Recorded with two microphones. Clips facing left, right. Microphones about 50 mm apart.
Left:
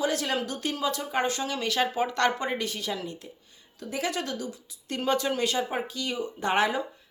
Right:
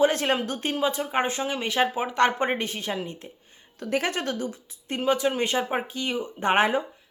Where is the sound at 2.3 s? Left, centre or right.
Right.